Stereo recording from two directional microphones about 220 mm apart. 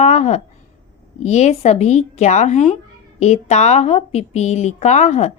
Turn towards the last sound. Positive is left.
turn(degrees=30)  # may be behind; listen again after turning